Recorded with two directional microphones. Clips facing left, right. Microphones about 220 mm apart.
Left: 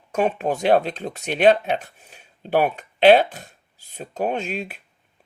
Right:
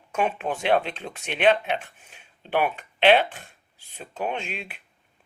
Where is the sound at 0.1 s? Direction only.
40° left (ahead or behind).